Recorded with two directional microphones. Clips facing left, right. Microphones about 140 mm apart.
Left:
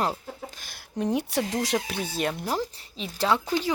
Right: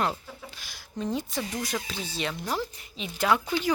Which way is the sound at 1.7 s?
55° left (ahead or behind).